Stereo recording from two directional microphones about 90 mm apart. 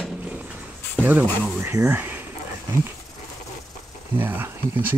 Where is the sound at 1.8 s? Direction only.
20° right (ahead or behind).